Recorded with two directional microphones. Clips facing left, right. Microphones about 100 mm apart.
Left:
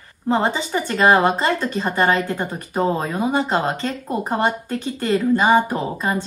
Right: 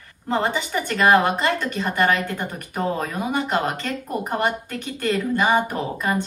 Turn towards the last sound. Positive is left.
turn(degrees=20)  # may be behind; listen again after turning